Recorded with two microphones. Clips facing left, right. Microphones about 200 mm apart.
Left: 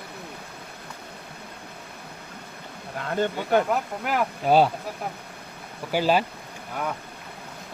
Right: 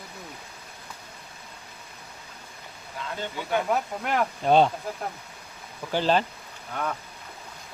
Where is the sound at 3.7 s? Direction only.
5° left (ahead or behind).